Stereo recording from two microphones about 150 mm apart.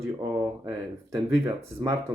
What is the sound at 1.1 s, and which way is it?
Speech, 20° right (ahead or behind).